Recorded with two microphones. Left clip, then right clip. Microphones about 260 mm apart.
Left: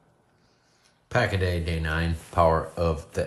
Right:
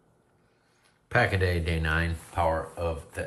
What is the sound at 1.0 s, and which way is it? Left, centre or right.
Speech, centre.